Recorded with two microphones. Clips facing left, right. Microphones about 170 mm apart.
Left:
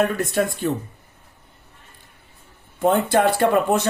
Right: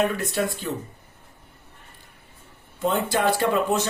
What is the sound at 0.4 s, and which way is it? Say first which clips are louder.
Speech: left 4 dB; 55° left (ahead or behind).